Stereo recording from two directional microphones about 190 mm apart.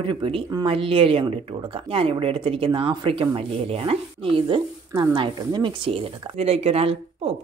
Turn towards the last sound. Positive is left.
turn(degrees=-30)  # may be behind; listen again after turning